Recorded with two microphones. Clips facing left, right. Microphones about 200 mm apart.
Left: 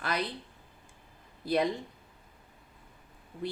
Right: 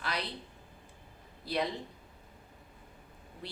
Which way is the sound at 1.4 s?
50° left (ahead or behind).